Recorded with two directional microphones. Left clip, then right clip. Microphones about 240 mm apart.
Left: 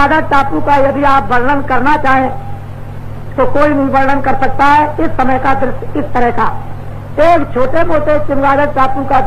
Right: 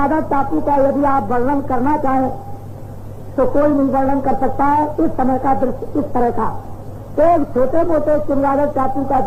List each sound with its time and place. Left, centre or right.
0.0 s speech: right
3.3 s speech: right